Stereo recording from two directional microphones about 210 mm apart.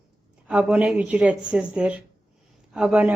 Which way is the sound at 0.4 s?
5° right (ahead or behind).